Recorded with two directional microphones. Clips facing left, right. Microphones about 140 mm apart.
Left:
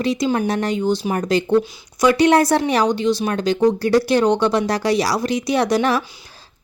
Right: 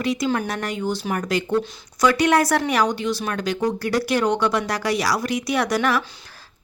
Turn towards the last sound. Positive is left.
turn(degrees=25)  # may be behind; listen again after turning